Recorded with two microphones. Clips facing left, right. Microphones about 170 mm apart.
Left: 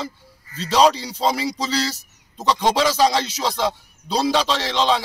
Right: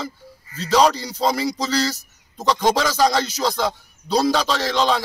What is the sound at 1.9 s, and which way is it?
Speech, 30° left (ahead or behind).